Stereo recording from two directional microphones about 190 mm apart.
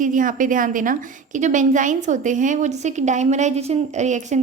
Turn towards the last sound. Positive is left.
turn(degrees=-40)  # may be behind; listen again after turning